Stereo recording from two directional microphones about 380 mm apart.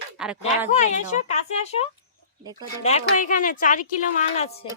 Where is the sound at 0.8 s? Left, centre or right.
Centre.